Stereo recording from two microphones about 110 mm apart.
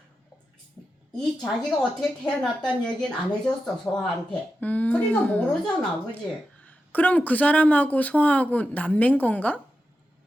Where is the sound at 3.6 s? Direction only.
5° left (ahead or behind).